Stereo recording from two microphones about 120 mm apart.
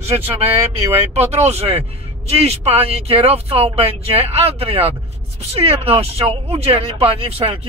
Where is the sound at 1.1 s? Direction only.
60° right (ahead or behind).